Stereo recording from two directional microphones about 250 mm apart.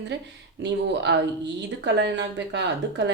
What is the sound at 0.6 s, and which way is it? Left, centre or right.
A woman's voice, right.